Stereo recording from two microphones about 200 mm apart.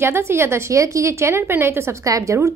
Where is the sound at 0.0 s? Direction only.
10° right (ahead or behind).